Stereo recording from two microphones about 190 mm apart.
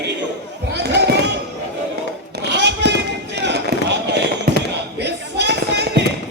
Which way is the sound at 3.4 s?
65° right (ahead or behind).